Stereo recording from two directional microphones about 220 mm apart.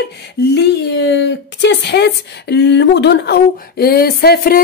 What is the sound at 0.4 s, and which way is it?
Speech, 50° left (ahead or behind).